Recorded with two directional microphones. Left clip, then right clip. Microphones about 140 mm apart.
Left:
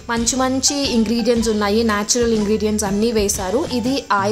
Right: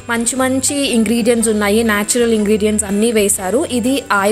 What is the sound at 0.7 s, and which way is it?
A woman's voice, 20° right (ahead or behind).